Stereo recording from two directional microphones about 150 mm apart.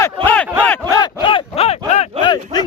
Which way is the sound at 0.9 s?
30° left (ahead or behind).